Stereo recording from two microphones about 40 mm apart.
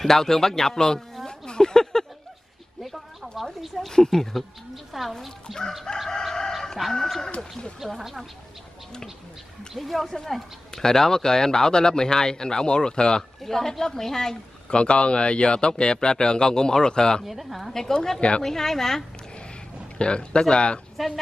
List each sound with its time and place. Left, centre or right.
0.0 s speech: centre
2.8 s speech: centre
3.8 s speech: centre
7.8 s speech: centre
9.8 s speech: centre; by 13.2 s left
13.4 s speech: centre
14.7 s a man's voice: left
17.2 s speech: centre
18.4 s speech: centre
20.0 s a man's voice: left